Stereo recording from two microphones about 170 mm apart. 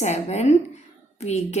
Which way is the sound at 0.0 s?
40° left (ahead or behind).